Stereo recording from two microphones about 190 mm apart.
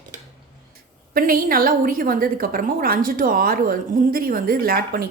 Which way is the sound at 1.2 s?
50° right (ahead or behind).